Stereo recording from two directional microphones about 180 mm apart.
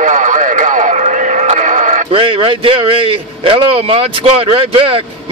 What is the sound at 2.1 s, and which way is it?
A man's voice, 30° right (ahead or behind).